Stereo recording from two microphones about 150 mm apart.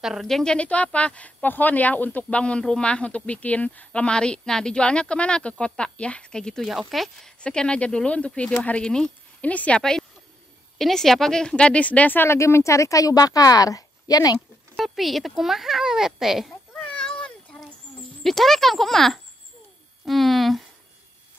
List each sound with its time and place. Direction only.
0.0 s speech: centre (ahead or behind); by 14.4 s 25° left (ahead or behind)
14.8 s a child's voice: centre (ahead or behind)
16.7 s cat: 10° left (ahead or behind)
18.2 s a child's voice: centre (ahead or behind)